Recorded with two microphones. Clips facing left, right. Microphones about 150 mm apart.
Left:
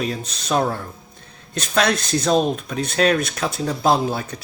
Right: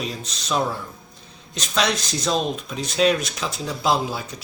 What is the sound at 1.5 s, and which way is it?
Speech, 55° left (ahead or behind).